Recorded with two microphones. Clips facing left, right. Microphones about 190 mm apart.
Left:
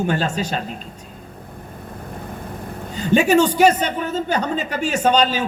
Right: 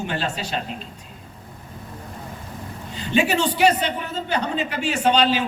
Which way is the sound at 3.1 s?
45° left (ahead or behind).